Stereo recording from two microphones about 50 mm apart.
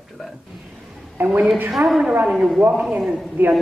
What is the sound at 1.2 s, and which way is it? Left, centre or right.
Speech, right.